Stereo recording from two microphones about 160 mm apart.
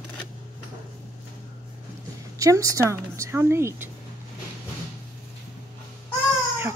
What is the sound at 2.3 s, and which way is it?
Speech, 20° right (ahead or behind).